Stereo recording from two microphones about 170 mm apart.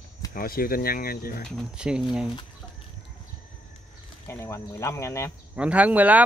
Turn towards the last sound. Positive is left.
turn(degrees=-10)  # may be behind; listen again after turning